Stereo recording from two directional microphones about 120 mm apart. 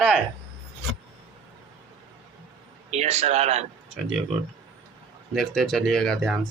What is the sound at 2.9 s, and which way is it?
Speech, 65° right (ahead or behind).